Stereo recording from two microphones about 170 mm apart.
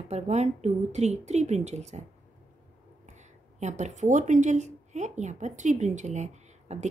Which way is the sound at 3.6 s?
45° right (ahead or behind).